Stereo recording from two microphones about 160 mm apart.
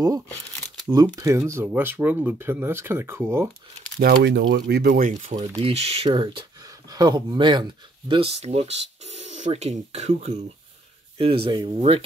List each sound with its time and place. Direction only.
1.1 s speech: 20° right (ahead or behind)
4.0 s speech: 80° right; by 5.3 s 55° right (ahead or behind)
5.6 s speech: 40° right (ahead or behind)
11.1 s speech: 35° right (ahead or behind)